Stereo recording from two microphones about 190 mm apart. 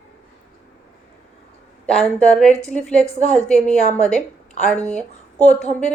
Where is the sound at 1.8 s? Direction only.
Centre (ahead or behind).